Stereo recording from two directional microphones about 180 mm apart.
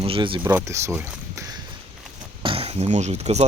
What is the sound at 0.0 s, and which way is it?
Speech, 30° right (ahead or behind).